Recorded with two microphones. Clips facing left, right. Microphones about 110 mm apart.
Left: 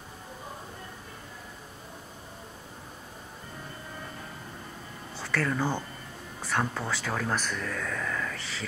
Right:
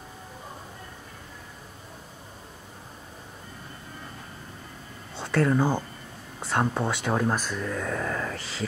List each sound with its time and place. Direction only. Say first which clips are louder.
5.2 s speech: right 6 dB; 25° right (ahead or behind)
7.4 s speech: right 2 dB; 10° right (ahead or behind)
7.7 s speech: right 4 dB; 30° right (ahead or behind)